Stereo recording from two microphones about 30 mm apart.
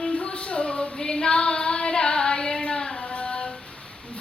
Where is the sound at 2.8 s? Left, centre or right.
Centre.